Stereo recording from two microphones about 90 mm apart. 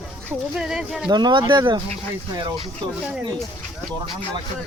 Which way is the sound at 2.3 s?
45° right (ahead or behind).